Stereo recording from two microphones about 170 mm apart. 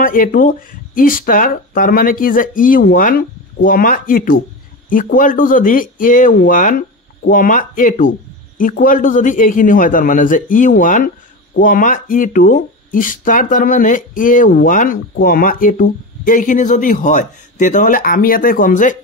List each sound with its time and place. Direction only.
0.0 s speech: 55° left (ahead or behind)